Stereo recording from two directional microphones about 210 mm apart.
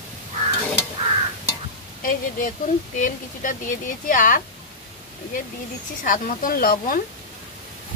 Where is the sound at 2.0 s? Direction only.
40° left (ahead or behind).